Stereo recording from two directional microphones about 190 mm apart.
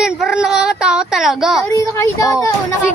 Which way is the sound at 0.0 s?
5° right (ahead or behind).